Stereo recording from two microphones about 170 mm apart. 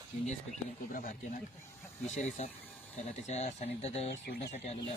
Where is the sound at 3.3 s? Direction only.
40° left (ahead or behind).